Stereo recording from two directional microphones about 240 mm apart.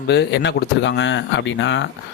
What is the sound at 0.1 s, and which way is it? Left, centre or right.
Speech, left.